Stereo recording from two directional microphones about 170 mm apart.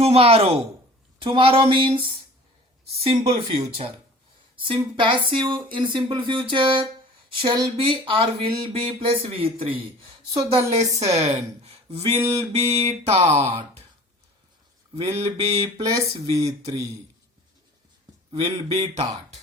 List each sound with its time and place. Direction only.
0.0 s speech: 35° right (ahead or behind)
4.7 s speech: 30° right (ahead or behind)
12.2 s speech: 20° right (ahead or behind)
12.5 s speech: 35° right (ahead or behind)
15.2 s speech: 35° right (ahead or behind)
15.6 s speech: 20° right (ahead or behind)
18.3 s speech: 35° right (ahead or behind)